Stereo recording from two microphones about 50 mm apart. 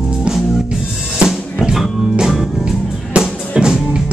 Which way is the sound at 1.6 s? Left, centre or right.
Centre.